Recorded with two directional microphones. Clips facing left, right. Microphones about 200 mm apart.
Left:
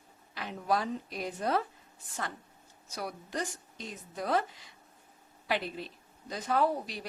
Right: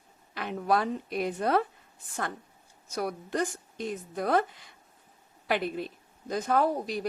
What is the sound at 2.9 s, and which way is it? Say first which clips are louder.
A woman's voice: right 6 dB; 50° right (ahead or behind).